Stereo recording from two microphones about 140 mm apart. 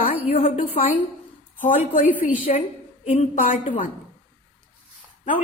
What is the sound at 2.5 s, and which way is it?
A woman's voice, 60° left (ahead or behind).